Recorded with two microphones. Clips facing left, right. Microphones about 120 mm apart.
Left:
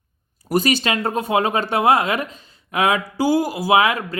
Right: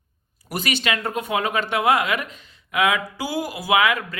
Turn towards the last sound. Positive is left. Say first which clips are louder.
# left 3 dB
turn(degrees=30)  # may be behind; listen again after turning